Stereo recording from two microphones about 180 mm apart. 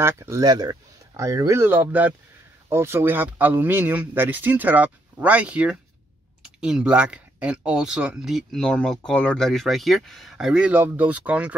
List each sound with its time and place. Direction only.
0.0 s speech: 15° right (ahead or behind)